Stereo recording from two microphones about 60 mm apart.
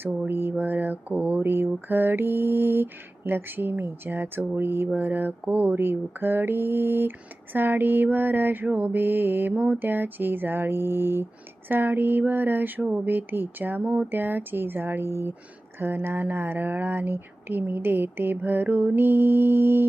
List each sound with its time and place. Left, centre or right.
0.3 s speech: right